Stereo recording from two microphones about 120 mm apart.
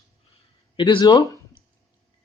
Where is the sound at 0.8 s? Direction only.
40° left (ahead or behind).